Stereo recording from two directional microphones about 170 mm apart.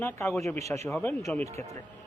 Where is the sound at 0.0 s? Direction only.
15° left (ahead or behind).